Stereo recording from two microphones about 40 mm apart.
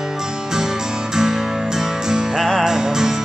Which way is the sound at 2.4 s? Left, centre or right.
Centre.